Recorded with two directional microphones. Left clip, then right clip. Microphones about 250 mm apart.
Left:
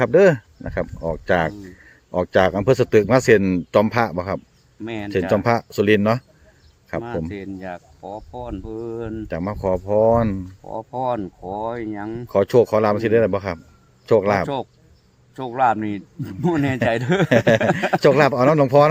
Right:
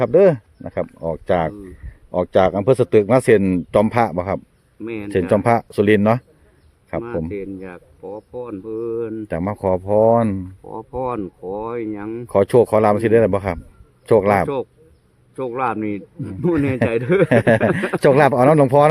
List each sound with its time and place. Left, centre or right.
0.0 s a man's voice: centre
4.8 s speech: left
5.3 s a man's voice: centre
7.3 s speech: centre
9.2 s a man's voice: centre
10.6 s a man's voice: centre
12.3 s a man's voice: centre
14.4 s a man's voice: centre
17.2 s speech: right